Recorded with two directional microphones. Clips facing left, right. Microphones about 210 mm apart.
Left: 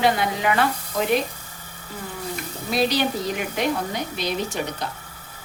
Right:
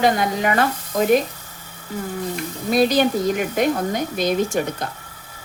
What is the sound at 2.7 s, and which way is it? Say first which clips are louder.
A woman's voice: right 5 dB; 45° right (ahead or behind).